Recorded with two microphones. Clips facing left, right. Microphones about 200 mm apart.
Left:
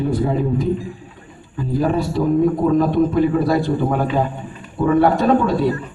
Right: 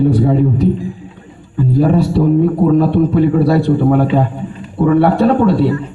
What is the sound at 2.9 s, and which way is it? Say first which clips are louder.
A man's voice: right 4 dB; 65° right (ahead or behind).